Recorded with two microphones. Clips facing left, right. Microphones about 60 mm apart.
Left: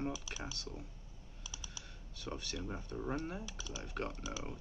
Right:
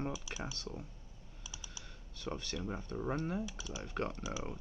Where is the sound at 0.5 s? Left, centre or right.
Right.